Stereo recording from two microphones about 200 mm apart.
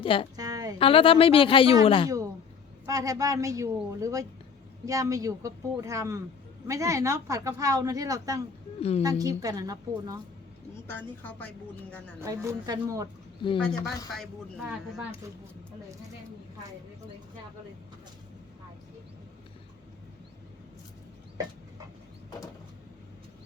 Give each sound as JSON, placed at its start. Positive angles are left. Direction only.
{"t": 0.0, "sound": "speech", "side_deg": 25}
{"t": 0.3, "sound": "a woman's voice", "side_deg": -20}
{"t": 0.8, "sound": "speech", "side_deg": 25}
{"t": 2.8, "sound": "speech", "side_deg": -15}
{"t": 8.8, "sound": "a woman's voice", "side_deg": 30}
{"t": 9.0, "sound": "speech", "side_deg": -20}
{"t": 11.2, "sound": "speech", "side_deg": 10}
{"t": 12.2, "sound": "speech", "side_deg": -15}
{"t": 13.6, "sound": "speech", "side_deg": 5}